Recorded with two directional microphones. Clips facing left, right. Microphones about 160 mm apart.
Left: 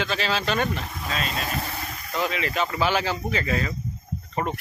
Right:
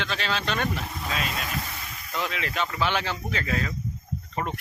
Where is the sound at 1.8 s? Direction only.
50° left (ahead or behind).